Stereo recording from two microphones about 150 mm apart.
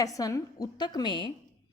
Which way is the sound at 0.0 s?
25° left (ahead or behind).